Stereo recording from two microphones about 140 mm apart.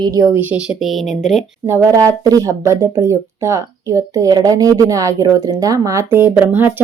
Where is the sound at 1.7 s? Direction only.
20° right (ahead or behind).